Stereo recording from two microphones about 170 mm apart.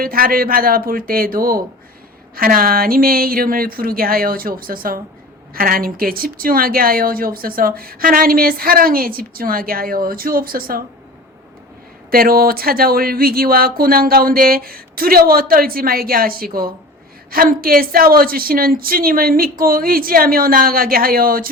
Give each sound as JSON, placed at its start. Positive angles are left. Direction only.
{"t": 0.0, "sound": "speech", "side_deg": -60}
{"t": 12.1, "sound": "speech", "side_deg": -60}